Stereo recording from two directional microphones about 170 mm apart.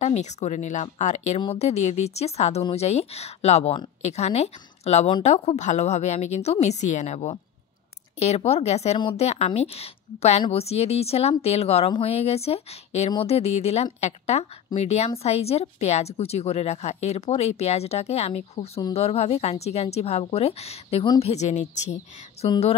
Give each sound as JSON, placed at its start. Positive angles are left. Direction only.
{"t": 0.0, "sound": "speech", "side_deg": 40}